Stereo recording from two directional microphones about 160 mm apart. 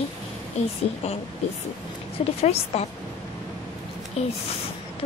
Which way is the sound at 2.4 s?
40° left (ahead or behind).